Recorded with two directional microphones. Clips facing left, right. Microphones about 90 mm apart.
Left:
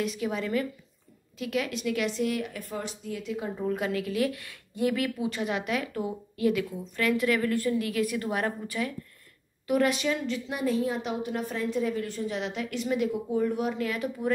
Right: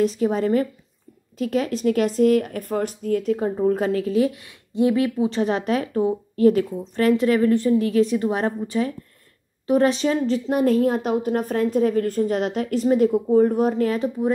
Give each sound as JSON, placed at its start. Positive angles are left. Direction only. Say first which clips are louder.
{"t": 0.0, "sound": "speech", "louder": "right 10 dB", "side_deg": -35}
{"t": 10.6, "sound": "a woman's voice", "louder": "right 8 dB", "side_deg": -50}